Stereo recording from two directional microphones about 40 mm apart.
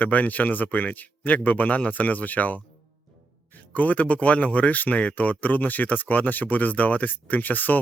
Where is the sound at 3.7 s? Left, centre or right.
Left.